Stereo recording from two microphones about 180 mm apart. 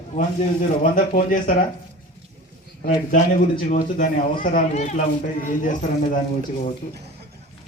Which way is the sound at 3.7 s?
50° left (ahead or behind).